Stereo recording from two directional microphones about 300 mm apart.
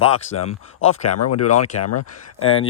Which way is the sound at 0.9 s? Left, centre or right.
Left.